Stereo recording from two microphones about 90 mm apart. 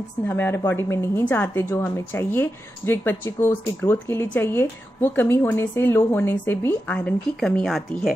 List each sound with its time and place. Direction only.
0.3 s a woman's voice: 25° left (ahead or behind)
7.0 s speech: 10° left (ahead or behind)